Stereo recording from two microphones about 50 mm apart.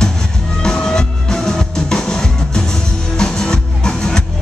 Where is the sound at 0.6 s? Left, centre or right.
Centre.